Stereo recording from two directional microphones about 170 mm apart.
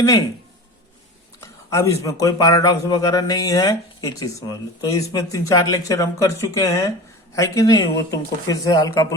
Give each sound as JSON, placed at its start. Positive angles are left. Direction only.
{"t": 1.4, "sound": "a man's voice", "side_deg": 20}